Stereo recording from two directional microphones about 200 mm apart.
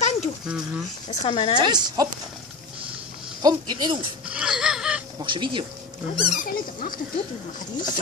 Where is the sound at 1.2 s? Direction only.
30° left (ahead or behind).